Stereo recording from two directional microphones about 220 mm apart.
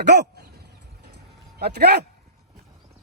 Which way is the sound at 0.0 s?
50° right (ahead or behind).